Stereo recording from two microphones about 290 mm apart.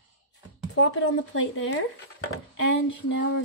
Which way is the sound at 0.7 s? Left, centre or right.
Left.